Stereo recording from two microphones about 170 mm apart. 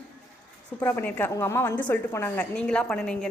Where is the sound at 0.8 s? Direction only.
10° left (ahead or behind).